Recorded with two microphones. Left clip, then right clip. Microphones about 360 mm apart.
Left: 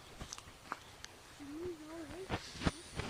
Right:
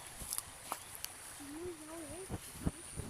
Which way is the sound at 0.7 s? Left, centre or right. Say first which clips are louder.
Right 1 dB; centre.